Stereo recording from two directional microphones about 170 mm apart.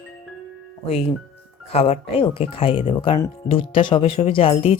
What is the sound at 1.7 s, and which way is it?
Speech, 35° left (ahead or behind).